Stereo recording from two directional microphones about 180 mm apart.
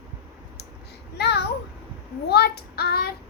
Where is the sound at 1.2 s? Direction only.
65° left (ahead or behind).